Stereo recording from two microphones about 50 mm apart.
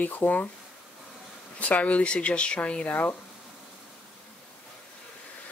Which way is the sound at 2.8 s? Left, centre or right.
Left.